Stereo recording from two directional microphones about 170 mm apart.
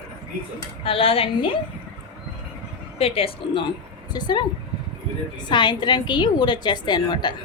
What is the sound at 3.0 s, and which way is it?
A woman's voice, 35° left (ahead or behind).